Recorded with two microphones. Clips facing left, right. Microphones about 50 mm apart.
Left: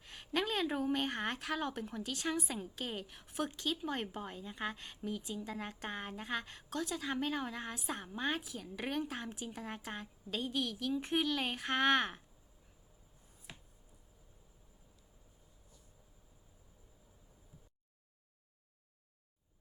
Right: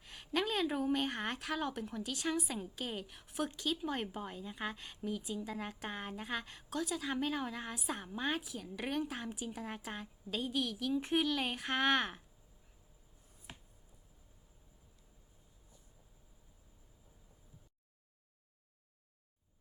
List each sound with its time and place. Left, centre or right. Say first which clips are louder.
0.0 s speech: even; centre